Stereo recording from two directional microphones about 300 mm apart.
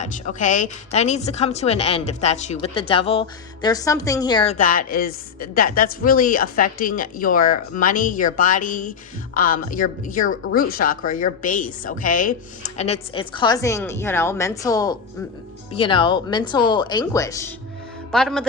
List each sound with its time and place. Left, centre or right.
0.0 s a woman's voice: left; by 18.4 s centre